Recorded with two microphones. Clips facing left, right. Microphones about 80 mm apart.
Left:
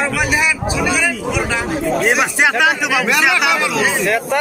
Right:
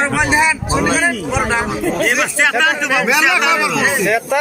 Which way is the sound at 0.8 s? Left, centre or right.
Right.